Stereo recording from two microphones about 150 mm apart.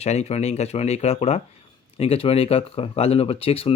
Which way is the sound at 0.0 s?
45° left (ahead or behind).